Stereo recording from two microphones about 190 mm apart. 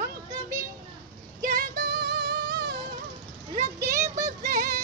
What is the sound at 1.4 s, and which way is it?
Music, 50° right (ahead or behind).